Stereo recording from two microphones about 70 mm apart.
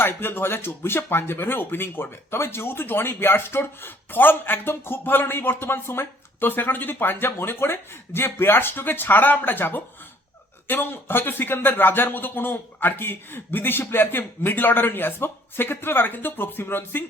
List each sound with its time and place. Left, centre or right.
0.0 s speech: left